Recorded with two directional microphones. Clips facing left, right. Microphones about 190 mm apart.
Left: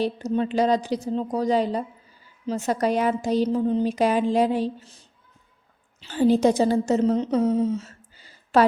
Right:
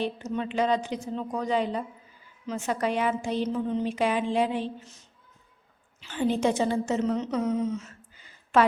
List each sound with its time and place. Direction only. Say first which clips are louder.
0.0 s a woman's voice: left 6 dB; 35° left (ahead or behind)